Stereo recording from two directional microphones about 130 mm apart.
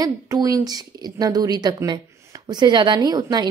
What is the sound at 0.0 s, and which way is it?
A woman's voice, 30° right (ahead or behind).